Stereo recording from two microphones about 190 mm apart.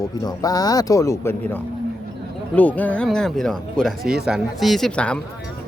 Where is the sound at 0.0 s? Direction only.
20° left (ahead or behind).